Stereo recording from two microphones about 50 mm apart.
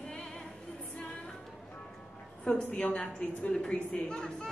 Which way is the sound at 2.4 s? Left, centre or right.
Centre.